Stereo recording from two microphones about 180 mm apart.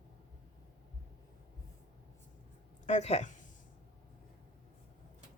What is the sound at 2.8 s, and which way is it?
Speech, 40° left (ahead or behind).